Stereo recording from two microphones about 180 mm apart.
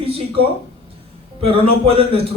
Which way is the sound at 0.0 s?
30° right (ahead or behind).